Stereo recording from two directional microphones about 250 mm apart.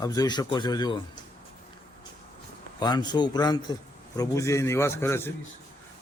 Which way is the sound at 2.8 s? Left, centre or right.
Centre.